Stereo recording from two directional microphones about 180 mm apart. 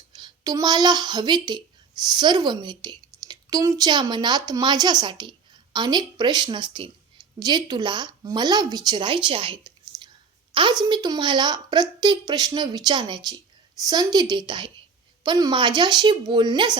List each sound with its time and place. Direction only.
0.1 s a woman's voice: 25° right (ahead or behind)